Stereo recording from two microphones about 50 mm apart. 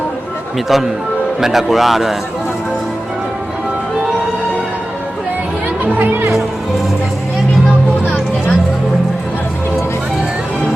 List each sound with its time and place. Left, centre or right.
0.7 s a man's voice: centre
5.8 s speech: right